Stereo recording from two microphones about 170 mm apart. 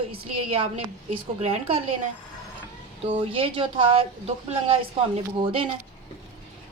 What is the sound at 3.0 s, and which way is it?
A woman's voice, 30° right (ahead or behind).